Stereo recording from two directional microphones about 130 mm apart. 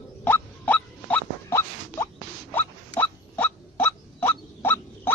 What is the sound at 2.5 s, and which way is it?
Hiccup, 15° left (ahead or behind).